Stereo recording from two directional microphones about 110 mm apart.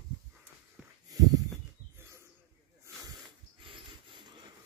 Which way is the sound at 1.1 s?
35° right (ahead or behind).